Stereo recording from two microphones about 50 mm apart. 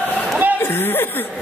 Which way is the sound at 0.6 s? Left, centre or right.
Left.